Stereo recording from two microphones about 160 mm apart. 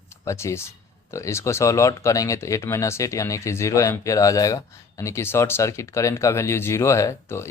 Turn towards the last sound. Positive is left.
turn(degrees=15)  # may be behind; listen again after turning